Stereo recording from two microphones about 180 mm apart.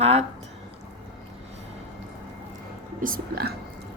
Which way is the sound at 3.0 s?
55° right (ahead or behind).